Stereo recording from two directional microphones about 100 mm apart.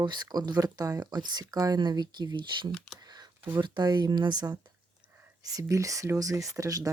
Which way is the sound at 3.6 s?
50° right (ahead or behind).